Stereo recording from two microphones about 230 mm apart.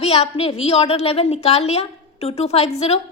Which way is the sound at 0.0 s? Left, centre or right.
Left.